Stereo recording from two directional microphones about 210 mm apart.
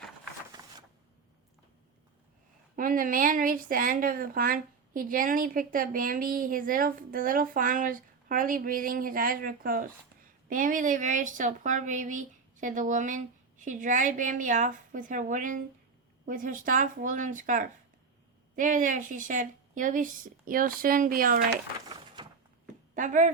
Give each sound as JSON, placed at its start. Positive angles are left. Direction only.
{"t": 2.7, "sound": "a woman's voice", "side_deg": -40}
{"t": 22.2, "sound": "a sound", "side_deg": -20}
{"t": 23.0, "sound": "a woman's voice", "side_deg": -35}